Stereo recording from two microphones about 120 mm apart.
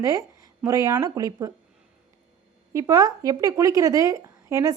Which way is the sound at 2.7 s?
30° right (ahead or behind).